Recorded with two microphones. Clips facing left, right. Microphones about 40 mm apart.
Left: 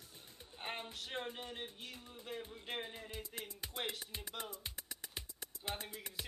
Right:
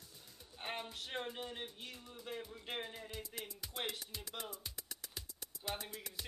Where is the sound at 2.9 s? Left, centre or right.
Centre.